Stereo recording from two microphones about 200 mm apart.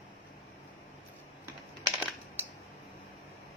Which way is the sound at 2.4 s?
10° right (ahead or behind).